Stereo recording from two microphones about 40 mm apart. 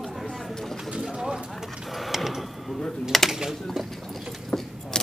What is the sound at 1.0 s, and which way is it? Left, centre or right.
Bird, centre.